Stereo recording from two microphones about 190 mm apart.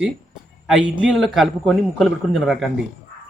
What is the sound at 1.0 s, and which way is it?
A man's voice, centre (ahead or behind).